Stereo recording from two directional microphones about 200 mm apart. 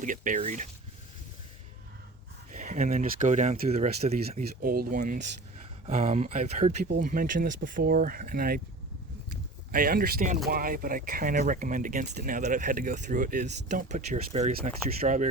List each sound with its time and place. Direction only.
0.0 s speech: 40° right (ahead or behind)
2.5 s speech: 35° right (ahead or behind)
4.4 s speech: 45° right (ahead or behind)